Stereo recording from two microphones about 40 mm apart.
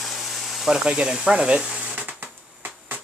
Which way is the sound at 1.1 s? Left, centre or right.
Centre.